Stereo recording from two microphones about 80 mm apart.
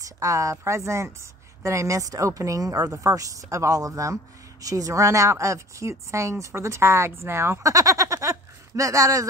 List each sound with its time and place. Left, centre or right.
0.0 s a woman's voice: right